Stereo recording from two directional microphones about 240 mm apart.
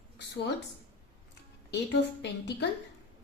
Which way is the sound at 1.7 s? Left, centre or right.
Left.